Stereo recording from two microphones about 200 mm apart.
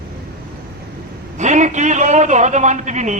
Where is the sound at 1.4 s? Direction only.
35° right (ahead or behind).